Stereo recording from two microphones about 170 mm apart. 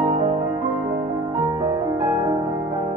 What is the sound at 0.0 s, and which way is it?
Music, 35° right (ahead or behind).